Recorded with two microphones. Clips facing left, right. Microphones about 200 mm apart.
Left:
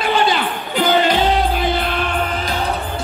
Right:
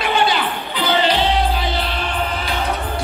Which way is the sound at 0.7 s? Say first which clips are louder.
Left 3 dB; 50° left (ahead or behind).